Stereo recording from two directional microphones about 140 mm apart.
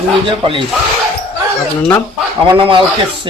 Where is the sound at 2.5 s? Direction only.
35° right (ahead or behind).